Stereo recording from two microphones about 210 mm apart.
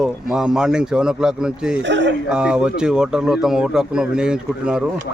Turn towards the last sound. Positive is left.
turn(degrees=-5)  # may be behind; listen again after turning